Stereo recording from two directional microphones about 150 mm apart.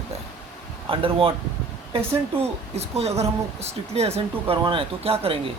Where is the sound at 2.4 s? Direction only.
45° right (ahead or behind).